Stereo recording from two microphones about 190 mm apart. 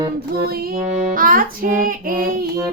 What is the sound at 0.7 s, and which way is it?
Music, 45° right (ahead or behind).